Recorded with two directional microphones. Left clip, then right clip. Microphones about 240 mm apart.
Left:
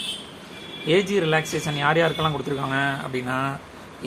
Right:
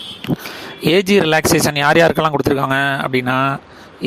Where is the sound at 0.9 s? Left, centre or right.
Right.